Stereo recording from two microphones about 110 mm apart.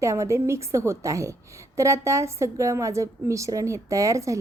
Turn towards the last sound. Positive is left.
turn(degrees=-30)  # may be behind; listen again after turning